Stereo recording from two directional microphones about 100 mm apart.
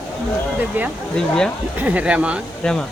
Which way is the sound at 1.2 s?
5° left (ahead or behind).